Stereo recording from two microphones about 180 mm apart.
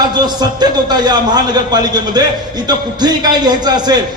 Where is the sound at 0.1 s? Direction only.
25° right (ahead or behind).